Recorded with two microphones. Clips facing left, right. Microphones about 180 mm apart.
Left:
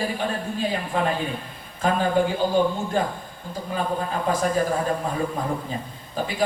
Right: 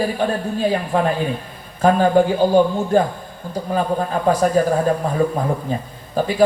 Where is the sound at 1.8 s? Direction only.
45° right (ahead or behind).